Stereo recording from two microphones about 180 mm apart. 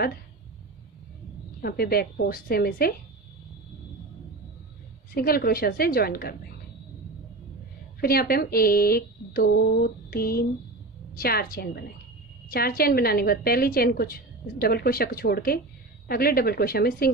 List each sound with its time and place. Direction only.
1.6 s a woman's voice: 60° left (ahead or behind)
5.1 s a woman's voice: 55° left (ahead or behind)
8.0 s a woman's voice: 55° left (ahead or behind)